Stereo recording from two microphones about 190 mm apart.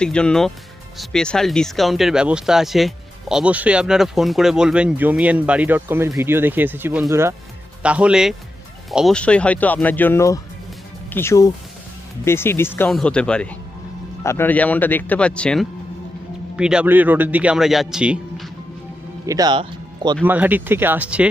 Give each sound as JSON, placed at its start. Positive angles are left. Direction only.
{"t": 0.0, "sound": "speech", "side_deg": 5}
{"t": 19.2, "sound": "speech", "side_deg": -20}
{"t": 20.2, "sound": "speech", "side_deg": -10}